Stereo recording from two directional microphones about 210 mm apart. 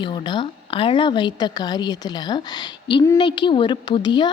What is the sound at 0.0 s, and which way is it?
A woman's voice, 20° left (ahead or behind).